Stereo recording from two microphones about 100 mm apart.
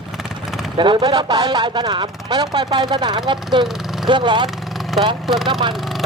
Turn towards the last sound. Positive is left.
turn(degrees=-50)  # may be behind; listen again after turning